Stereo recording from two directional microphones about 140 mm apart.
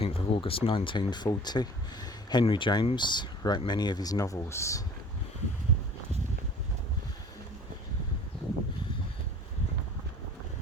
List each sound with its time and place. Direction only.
0.0 s speech: 40° left (ahead or behind); by 4.8 s 20° left (ahead or behind)